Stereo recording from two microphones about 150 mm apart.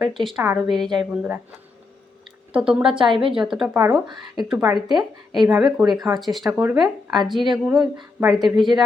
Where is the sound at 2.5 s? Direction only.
5° right (ahead or behind).